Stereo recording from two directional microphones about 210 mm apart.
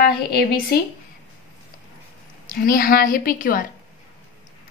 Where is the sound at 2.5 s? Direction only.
40° left (ahead or behind).